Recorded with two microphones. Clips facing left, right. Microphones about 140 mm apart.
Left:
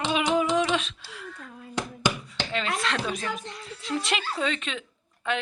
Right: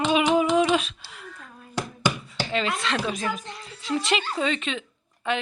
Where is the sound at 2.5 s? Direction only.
Centre (ahead or behind).